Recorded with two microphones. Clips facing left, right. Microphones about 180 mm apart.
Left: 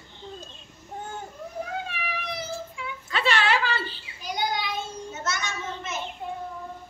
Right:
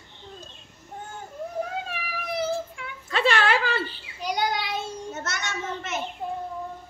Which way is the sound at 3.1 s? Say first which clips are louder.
Right 2 dB; 50° right (ahead or behind).